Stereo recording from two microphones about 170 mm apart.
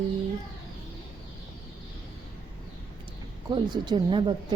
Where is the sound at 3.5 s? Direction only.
25° right (ahead or behind).